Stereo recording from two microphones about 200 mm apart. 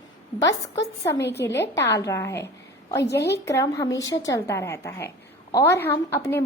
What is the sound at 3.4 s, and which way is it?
A woman's voice, 15° left (ahead or behind).